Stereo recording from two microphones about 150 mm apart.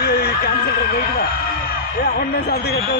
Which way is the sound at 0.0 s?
90° left.